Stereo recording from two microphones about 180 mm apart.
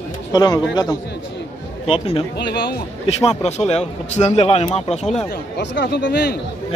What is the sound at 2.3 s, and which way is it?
Speech, 70° left (ahead or behind).